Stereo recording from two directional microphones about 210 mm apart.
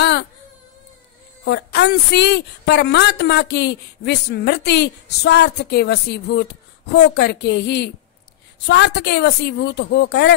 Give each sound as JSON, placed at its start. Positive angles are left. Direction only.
{"t": 0.0, "sound": "baby cry", "side_deg": 55}
{"t": 1.4, "sound": "speech", "side_deg": 55}